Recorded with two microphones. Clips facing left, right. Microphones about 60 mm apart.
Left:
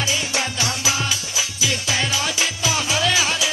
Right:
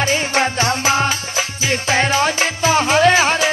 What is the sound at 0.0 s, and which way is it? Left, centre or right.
Music, right.